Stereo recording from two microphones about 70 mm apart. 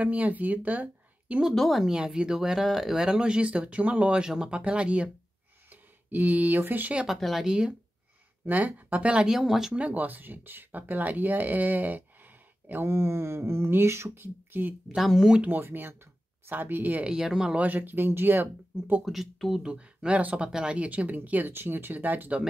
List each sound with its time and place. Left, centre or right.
0.0 s speech: right
1.5 s speech: centre
1.9 s speech: centre
7.1 s speech: centre
8.5 s speech: right; by 9.8 s centre
9.8 s speech: right
15.0 s speech: centre
15.4 s speech: right
17.1 s speech: centre
17.6 s speech: right
19.0 s speech: centre
19.7 s speech: centre